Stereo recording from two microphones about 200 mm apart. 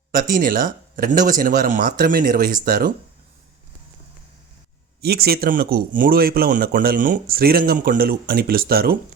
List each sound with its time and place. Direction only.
0.1 s speech: 45° right (ahead or behind)
4.9 s speech: 50° right (ahead or behind)